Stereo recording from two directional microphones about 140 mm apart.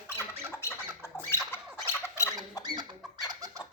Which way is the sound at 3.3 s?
25° right (ahead or behind).